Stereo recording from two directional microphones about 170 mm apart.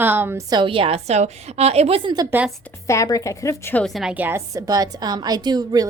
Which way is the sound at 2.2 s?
10° right (ahead or behind).